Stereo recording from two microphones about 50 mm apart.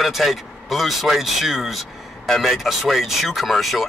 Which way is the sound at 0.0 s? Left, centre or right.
Centre.